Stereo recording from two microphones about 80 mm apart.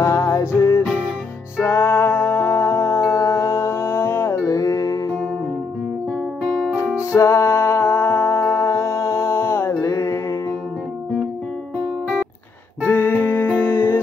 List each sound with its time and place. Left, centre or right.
0.0 s music: left
6.5 s music: centre
7.1 s music: left
12.8 s music: left